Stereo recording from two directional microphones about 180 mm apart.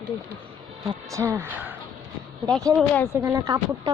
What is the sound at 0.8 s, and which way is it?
Speech, 15° right (ahead or behind).